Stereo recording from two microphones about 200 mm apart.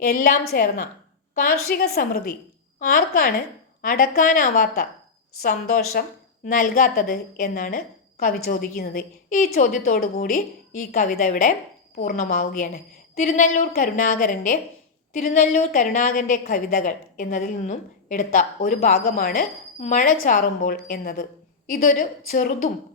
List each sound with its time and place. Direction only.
0.0 s a woman's voice: 45° left (ahead or behind)
18.9 s a woman's voice: 45° left (ahead or behind)